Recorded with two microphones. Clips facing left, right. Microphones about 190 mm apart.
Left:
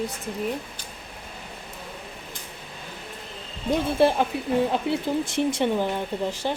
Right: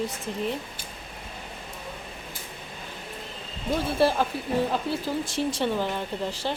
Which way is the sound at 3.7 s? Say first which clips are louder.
Left 3 dB; 20° left (ahead or behind).